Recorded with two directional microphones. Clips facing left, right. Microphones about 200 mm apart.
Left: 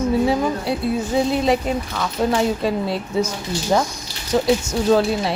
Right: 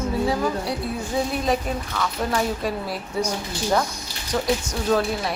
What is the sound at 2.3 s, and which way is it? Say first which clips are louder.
Speech: left 5 dB; 25° left (ahead or behind).